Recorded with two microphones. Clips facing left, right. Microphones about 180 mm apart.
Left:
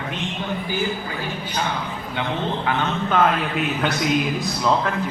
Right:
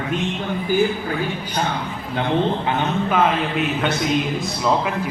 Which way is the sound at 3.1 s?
5° right (ahead or behind).